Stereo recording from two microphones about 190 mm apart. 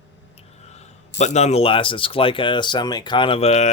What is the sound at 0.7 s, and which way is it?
Speech, 35° left (ahead or behind).